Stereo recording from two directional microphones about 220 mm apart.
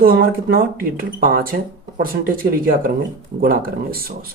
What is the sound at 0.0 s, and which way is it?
Speech, 40° right (ahead or behind).